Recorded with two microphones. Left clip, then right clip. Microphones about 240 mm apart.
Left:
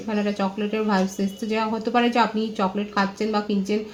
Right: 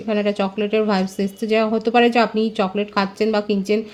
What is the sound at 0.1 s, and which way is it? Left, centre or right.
Speech, right.